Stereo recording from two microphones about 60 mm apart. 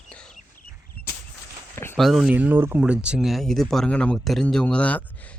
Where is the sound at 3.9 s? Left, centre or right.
Left.